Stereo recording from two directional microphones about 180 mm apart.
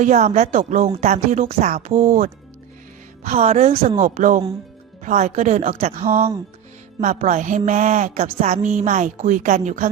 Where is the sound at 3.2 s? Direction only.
35° right (ahead or behind).